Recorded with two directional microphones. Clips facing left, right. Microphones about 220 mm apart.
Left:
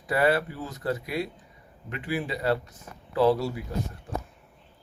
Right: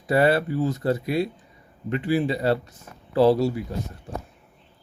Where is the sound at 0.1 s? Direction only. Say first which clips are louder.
Right 4 dB; 30° right (ahead or behind).